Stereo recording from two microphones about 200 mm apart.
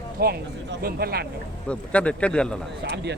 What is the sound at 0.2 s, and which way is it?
Speech, 50° right (ahead or behind).